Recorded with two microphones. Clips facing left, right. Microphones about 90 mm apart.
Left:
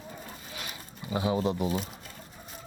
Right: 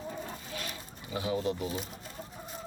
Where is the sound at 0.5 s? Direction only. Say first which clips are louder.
Right 1 dB; 10° left (ahead or behind).